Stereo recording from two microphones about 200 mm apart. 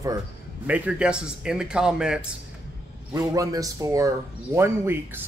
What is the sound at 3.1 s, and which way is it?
A man's voice, 15° right (ahead or behind).